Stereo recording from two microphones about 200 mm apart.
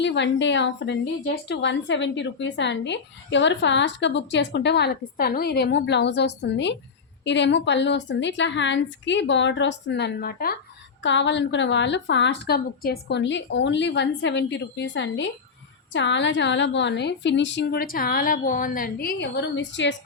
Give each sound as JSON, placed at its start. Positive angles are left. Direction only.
{"t": 0.0, "sound": "a woman's voice", "side_deg": 60}
{"t": 11.0, "sound": "a woman's voice", "side_deg": 65}